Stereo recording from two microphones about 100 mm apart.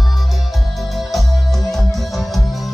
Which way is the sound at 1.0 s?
Centre (ahead or behind).